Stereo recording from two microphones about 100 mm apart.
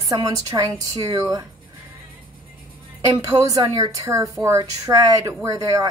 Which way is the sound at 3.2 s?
30° right (ahead or behind).